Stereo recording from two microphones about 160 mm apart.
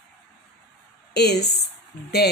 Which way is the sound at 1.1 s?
90° left.